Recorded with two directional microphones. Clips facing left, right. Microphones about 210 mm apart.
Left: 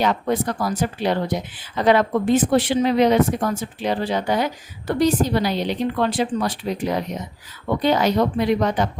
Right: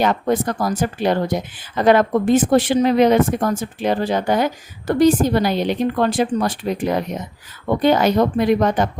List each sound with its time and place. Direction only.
0.0 s speech: 50° right (ahead or behind)